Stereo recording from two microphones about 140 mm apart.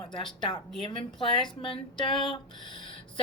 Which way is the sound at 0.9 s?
35° left (ahead or behind).